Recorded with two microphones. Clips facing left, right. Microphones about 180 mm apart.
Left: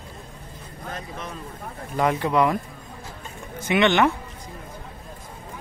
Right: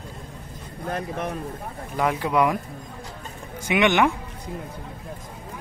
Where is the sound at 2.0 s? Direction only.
5° right (ahead or behind).